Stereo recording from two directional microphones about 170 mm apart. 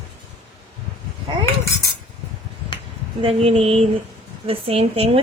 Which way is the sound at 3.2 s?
35° right (ahead or behind).